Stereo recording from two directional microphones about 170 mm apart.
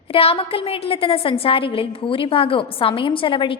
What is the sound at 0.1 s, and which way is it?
A woman's voice, 35° left (ahead or behind).